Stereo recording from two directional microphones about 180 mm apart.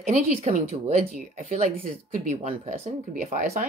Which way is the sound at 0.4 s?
35° right (ahead or behind).